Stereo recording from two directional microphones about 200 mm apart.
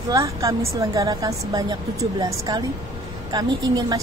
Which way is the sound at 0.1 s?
15° right (ahead or behind).